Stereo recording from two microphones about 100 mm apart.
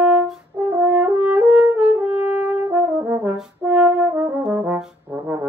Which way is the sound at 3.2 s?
10° right (ahead or behind).